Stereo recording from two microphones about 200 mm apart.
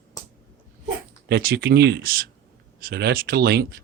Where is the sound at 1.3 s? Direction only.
50° right (ahead or behind).